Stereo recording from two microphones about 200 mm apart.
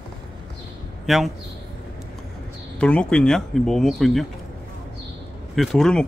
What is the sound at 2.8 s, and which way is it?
Speech, 5° left (ahead or behind).